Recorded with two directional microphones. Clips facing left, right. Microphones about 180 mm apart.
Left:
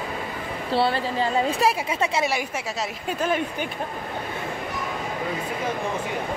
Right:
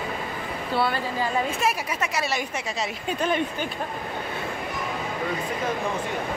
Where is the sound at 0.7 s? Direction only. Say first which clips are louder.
Left 3 dB; 30° left (ahead or behind).